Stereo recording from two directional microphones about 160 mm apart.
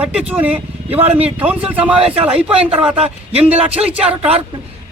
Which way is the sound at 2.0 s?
35° right (ahead or behind).